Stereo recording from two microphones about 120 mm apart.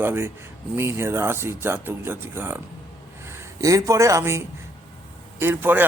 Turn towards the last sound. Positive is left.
turn(degrees=-15)  # may be behind; listen again after turning